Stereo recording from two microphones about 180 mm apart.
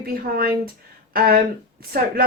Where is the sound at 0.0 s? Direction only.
55° right (ahead or behind).